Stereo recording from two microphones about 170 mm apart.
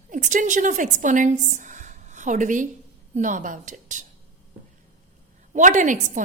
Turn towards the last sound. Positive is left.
turn(degrees=-50)  # may be behind; listen again after turning